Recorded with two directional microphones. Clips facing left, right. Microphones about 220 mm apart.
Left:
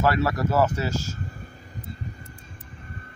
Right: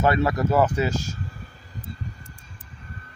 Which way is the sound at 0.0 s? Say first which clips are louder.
Right 2 dB; 20° right (ahead or behind).